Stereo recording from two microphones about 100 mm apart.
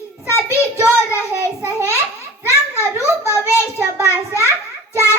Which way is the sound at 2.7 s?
25° left (ahead or behind).